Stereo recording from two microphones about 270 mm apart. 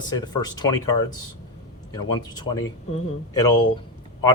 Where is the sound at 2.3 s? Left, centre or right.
Centre.